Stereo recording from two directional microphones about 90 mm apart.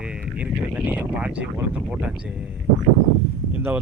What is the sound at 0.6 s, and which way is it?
Speech, 15° right (ahead or behind).